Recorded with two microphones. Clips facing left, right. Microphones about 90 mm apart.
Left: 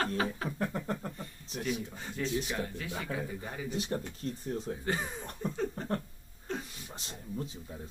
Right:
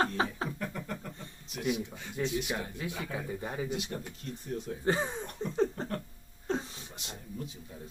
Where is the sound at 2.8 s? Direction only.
20° right (ahead or behind).